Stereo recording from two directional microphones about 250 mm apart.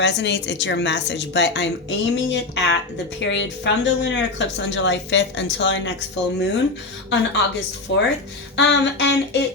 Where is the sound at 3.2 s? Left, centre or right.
Left.